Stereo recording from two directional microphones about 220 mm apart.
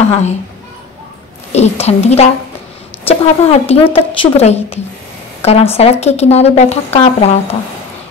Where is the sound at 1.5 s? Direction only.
30° left (ahead or behind).